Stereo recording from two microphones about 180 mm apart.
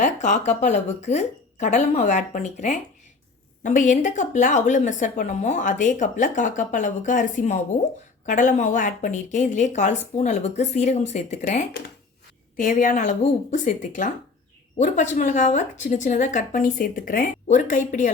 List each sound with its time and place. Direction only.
0.0 s a woman's voice: 40° left (ahead or behind)